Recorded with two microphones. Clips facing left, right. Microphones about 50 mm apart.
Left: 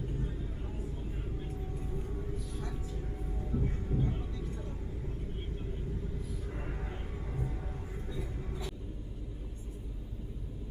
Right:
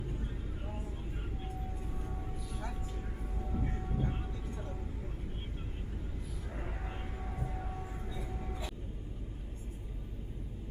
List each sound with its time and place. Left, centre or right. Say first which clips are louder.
3.4 s train: left 2 dB; centre
4.1 s vehicle: left 2 dB; right